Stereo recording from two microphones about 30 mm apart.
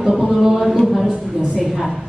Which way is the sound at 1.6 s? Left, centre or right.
Centre.